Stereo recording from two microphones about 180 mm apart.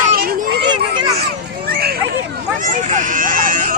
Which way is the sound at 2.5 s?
45° right (ahead or behind).